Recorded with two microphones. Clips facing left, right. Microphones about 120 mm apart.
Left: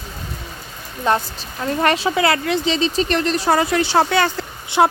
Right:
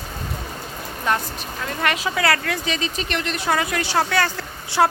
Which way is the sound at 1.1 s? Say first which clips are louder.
Left 4 dB; 30° left (ahead or behind).